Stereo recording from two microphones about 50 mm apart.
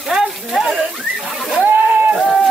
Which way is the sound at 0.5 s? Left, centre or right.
Centre.